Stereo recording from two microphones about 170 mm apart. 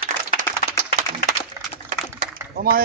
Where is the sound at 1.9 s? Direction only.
50° right (ahead or behind).